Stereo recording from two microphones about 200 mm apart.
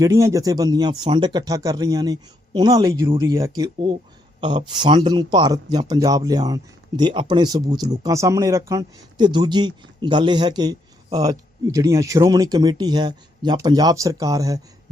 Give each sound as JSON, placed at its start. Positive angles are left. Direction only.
{"t": 0.0, "sound": "speech", "side_deg": -15}